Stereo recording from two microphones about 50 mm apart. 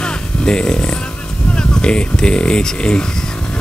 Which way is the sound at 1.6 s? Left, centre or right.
Centre.